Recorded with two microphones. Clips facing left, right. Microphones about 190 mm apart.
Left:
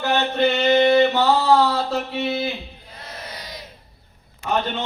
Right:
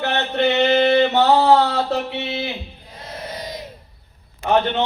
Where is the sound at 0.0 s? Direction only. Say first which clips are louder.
Even; 65° right (ahead or behind).